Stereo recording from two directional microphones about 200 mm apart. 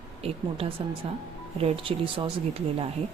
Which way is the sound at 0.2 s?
30° right (ahead or behind).